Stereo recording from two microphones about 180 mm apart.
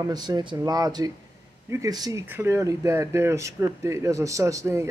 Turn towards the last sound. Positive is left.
turn(degrees=-15)  # may be behind; listen again after turning